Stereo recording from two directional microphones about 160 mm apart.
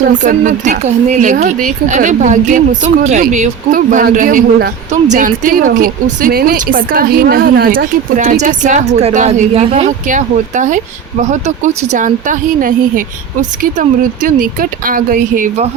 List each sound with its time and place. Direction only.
0.1 s speech: 50° right (ahead or behind)